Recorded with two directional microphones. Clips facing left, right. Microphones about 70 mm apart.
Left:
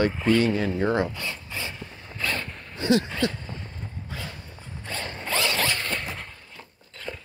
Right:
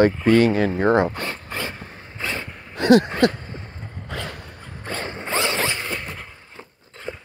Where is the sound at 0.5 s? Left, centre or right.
Right.